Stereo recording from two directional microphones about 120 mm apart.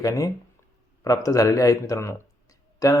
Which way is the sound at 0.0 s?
30° left (ahead or behind).